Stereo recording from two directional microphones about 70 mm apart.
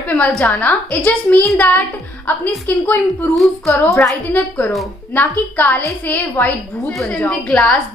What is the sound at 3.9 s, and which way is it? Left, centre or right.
Speech, left.